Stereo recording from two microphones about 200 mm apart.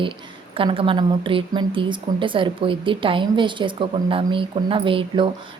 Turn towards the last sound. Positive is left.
turn(degrees=-25)  # may be behind; listen again after turning